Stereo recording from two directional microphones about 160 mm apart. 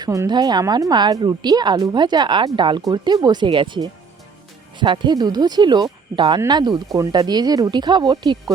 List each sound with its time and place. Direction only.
0.0 s a woman's voice: 25° right (ahead or behind)